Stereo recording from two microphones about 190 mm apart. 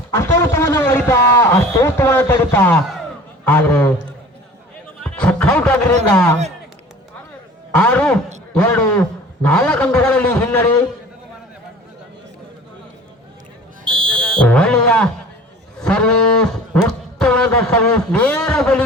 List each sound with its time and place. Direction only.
0.1 s a man's voice: 15° left (ahead or behind)
4.9 s music: 5° left (ahead or behind)
7.7 s a man's voice: 5° left (ahead or behind)
13.8 s fire alarm: 25° right (ahead or behind)
14.2 s music: 5° left (ahead or behind)
15.8 s cattle: 5° left (ahead or behind)